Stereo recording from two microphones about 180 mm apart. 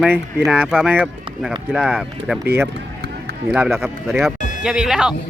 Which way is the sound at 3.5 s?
Centre (ahead or behind).